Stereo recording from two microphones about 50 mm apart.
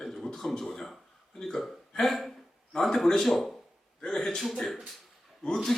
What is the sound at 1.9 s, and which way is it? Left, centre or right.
Hiccup, centre.